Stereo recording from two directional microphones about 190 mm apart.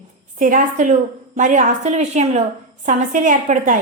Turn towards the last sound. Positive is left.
turn(degrees=-45)  # may be behind; listen again after turning